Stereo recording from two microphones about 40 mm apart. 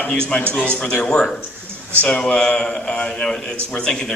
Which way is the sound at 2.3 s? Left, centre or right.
Left.